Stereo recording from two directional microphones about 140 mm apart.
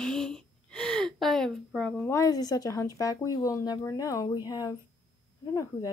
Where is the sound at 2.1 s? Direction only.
25° left (ahead or behind).